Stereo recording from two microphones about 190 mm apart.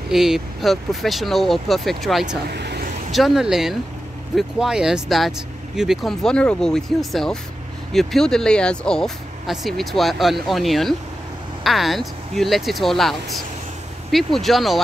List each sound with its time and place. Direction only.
0.1 s speech: centre (ahead or behind)
2.5 s vehicle: 60° right (ahead or behind)
3.1 s speech: centre (ahead or behind)